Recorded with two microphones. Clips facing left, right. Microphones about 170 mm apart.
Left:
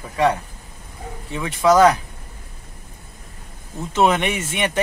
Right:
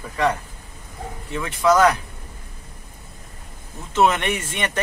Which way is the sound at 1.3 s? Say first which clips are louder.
Left 2 dB; 20° left (ahead or behind).